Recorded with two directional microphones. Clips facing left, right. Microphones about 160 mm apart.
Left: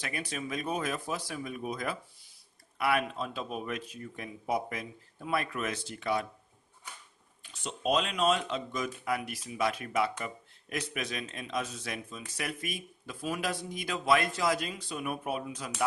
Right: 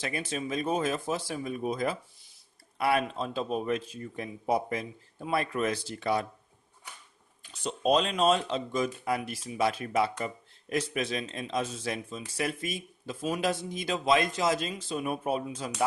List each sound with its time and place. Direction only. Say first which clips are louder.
0.0 s speech: right 4 dB; 25° right (ahead or behind)
7.6 s speech: right 4 dB; 35° right (ahead or behind)